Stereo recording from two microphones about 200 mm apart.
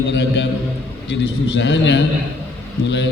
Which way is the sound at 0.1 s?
65° left (ahead or behind).